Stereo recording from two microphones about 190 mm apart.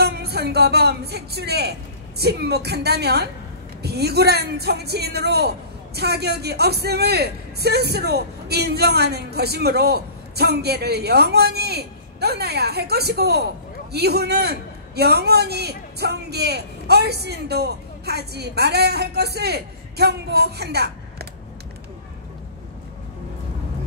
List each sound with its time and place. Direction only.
0.0 s a man's voice: 55° right (ahead or behind)